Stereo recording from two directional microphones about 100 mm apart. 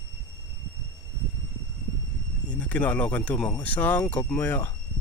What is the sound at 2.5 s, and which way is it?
Speech, 15° left (ahead or behind).